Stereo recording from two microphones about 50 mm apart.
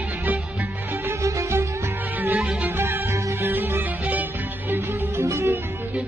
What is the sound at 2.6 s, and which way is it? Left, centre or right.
Music, right.